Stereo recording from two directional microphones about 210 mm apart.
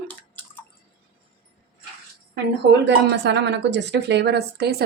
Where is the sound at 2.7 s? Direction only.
55° right (ahead or behind).